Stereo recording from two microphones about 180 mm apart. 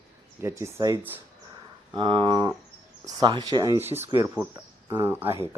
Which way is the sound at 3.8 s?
35° right (ahead or behind).